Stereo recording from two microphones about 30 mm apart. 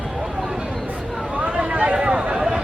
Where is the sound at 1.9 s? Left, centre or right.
Right.